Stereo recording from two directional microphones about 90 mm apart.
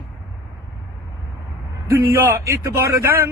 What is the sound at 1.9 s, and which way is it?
Speech, 25° right (ahead or behind).